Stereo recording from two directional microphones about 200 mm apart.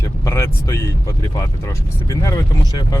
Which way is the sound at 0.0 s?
15° left (ahead or behind).